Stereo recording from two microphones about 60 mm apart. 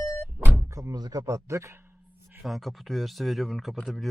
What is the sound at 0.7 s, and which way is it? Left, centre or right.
Speech, right.